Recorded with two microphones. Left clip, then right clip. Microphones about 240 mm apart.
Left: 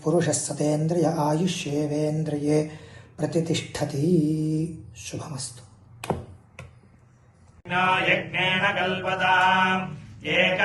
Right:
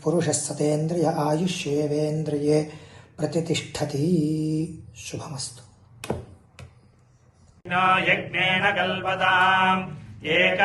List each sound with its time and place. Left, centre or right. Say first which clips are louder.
0.0 s speech: even; centre
4.4 s mantra: right 1 dB; centre
4.6 s speech: even; centre
7.7 s mantra: right 1 dB; centre